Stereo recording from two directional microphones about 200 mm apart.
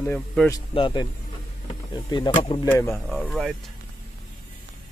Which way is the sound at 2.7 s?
15° left (ahead or behind).